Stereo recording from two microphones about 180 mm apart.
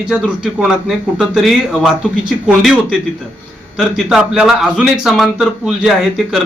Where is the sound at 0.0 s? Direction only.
5° right (ahead or behind).